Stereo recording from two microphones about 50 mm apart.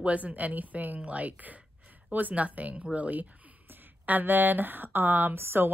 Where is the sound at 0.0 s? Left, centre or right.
Right.